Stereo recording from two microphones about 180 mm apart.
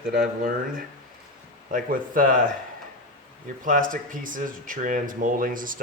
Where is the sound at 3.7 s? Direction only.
50° right (ahead or behind).